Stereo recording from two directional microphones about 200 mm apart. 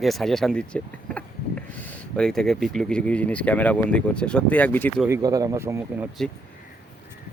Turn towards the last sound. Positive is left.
turn(degrees=-10)  # may be behind; listen again after turning